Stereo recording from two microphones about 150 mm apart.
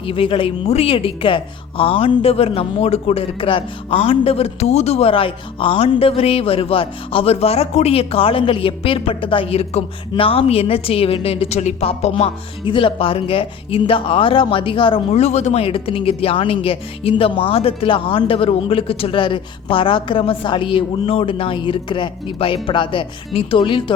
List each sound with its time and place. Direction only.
0.0 s speech: 40° left (ahead or behind)